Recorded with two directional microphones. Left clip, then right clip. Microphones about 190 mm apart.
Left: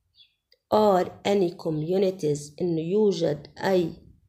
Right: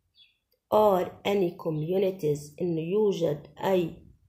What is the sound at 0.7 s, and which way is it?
A woman's voice, 30° left (ahead or behind).